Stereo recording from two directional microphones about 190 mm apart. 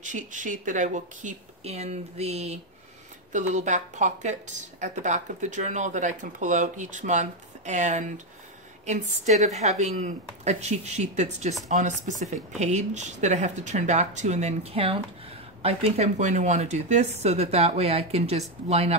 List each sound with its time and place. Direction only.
0.0 s speech: 40° right (ahead or behind)